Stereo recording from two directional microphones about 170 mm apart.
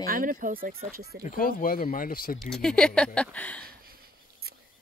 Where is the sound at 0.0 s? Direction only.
55° right (ahead or behind).